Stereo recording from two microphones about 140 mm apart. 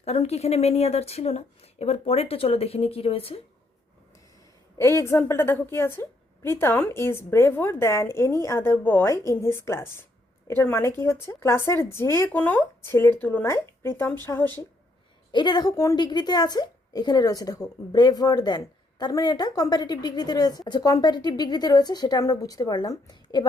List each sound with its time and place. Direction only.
0.0 s speech: 50° left (ahead or behind)
4.8 s a woman's voice: 20° left (ahead or behind)
15.3 s a woman's voice: 30° left (ahead or behind)